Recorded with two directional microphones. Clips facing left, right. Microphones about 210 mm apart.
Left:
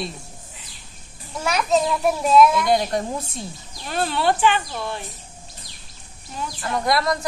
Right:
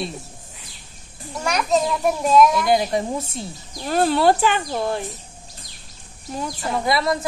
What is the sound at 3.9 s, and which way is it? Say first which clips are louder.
Speech: right 5 dB; 45° right (ahead or behind).